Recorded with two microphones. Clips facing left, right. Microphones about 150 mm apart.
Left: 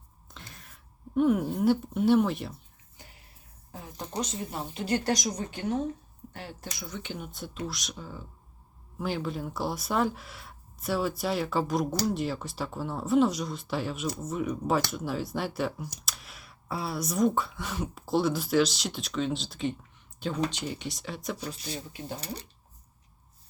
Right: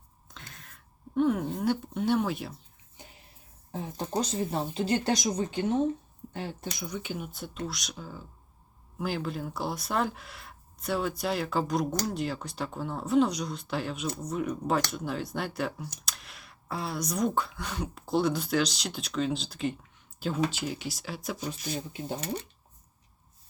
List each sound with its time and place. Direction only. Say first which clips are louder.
0.3 s a sound: even; centre (ahead or behind)
3.0 s music: right 2 dB; 20° right (ahead or behind)
3.7 s speech: right 6 dB; 25° right (ahead or behind); by 21.8 s 10° right (ahead or behind)